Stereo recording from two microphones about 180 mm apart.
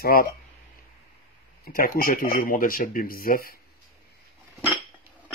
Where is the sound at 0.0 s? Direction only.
55° left (ahead or behind).